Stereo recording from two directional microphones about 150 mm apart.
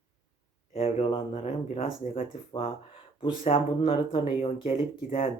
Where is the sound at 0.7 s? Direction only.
45° left (ahead or behind).